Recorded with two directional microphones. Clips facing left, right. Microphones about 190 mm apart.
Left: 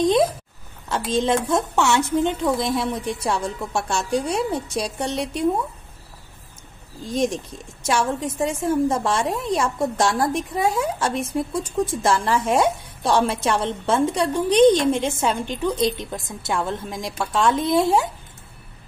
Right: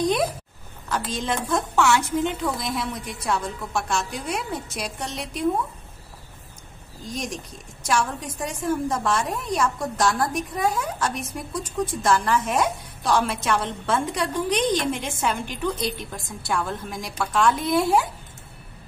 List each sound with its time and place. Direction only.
0.0 s a woman's voice: 25° left (ahead or behind)
7.8 s a woman's voice: 25° left (ahead or behind)